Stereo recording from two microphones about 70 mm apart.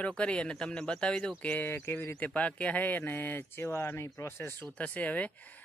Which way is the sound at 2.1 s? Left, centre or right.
Centre.